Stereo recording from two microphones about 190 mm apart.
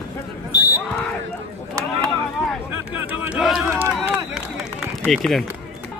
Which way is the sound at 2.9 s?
10° right (ahead or behind).